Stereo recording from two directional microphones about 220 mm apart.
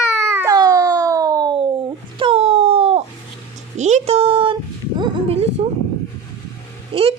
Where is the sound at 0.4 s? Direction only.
15° right (ahead or behind).